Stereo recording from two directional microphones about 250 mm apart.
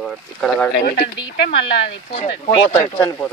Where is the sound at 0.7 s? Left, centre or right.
Left.